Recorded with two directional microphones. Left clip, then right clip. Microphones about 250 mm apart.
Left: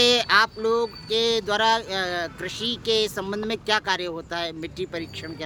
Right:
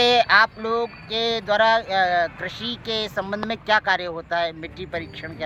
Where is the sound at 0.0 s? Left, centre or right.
Centre.